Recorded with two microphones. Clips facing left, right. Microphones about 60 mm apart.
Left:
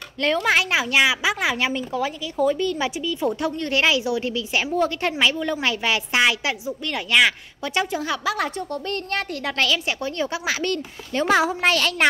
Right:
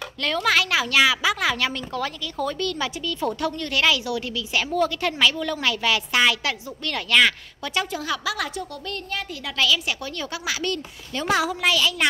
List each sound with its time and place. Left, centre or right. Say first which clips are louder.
0.2 s a woman's voice: left 2 dB; left
8.9 s a woman's voice: left 3 dB; left
11.7 s a woman's voice: left 2 dB; left